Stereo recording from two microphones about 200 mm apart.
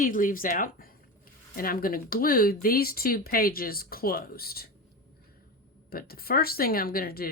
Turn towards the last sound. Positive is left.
turn(degrees=50)  # may be behind; listen again after turning